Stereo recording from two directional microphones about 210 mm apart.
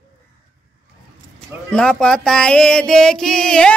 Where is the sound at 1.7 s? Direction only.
5° left (ahead or behind).